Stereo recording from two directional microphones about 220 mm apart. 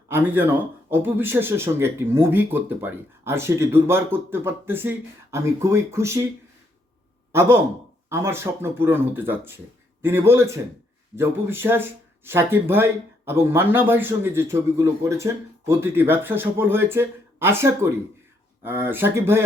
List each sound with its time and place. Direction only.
0.1 s speech: 10° right (ahead or behind)
7.3 s speech: 10° right (ahead or behind)